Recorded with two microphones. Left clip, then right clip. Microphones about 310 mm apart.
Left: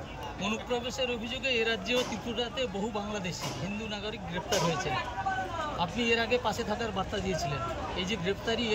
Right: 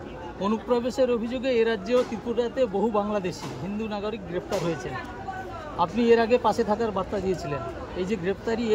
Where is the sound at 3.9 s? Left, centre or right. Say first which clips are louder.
Right 8 dB; right.